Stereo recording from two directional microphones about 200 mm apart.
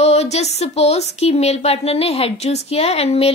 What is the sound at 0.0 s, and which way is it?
Speech, 30° left (ahead or behind).